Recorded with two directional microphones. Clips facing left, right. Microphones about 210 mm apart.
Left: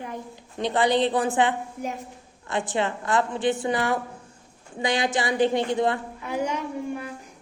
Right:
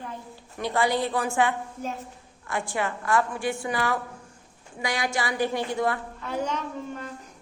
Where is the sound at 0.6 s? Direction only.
20° left (ahead or behind).